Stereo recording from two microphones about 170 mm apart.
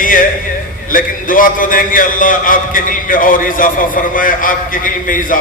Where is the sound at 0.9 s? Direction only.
55° left (ahead or behind).